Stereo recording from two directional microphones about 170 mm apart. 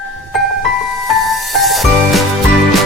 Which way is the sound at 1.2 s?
Centre (ahead or behind).